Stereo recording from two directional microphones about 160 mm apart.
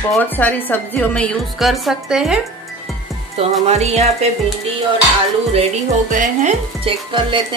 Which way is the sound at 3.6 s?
40° right (ahead or behind).